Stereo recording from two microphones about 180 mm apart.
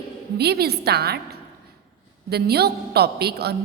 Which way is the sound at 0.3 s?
65° right (ahead or behind).